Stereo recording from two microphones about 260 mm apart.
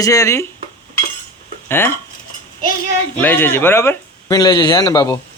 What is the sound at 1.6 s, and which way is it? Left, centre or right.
Speech, centre.